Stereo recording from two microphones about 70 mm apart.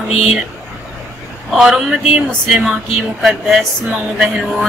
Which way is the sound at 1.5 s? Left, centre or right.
Centre.